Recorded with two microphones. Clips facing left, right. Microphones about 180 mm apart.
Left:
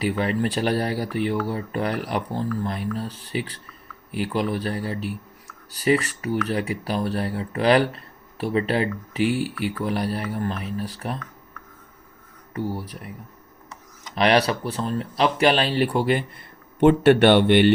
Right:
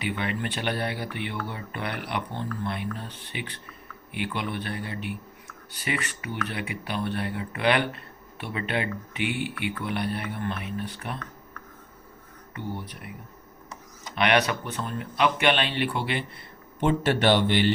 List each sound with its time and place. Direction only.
0.0 s speech: 40° left (ahead or behind)
12.5 s speech: 40° left (ahead or behind)
14.2 s speech: 35° left (ahead or behind)
16.8 s speech: 60° left (ahead or behind)